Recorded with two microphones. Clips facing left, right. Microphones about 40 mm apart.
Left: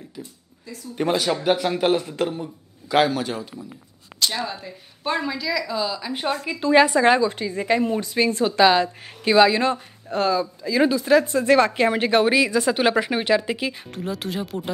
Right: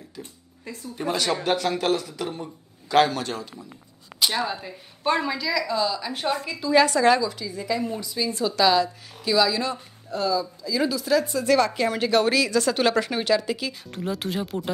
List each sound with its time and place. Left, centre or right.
0.7 s speech: right
1.1 s speech: centre
2.3 s speech: centre
4.2 s speech: centre
6.7 s speech: left
8.5 s speech: left
13.9 s speech: centre